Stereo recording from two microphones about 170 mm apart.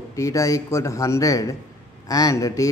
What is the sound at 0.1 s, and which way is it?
Speech, 20° left (ahead or behind).